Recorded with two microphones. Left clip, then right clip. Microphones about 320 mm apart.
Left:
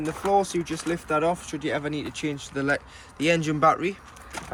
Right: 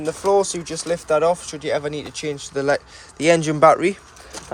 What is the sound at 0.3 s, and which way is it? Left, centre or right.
Speech, centre.